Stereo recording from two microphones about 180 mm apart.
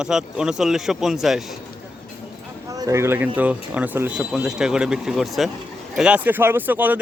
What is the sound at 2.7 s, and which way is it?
Speech, 20° right (ahead or behind).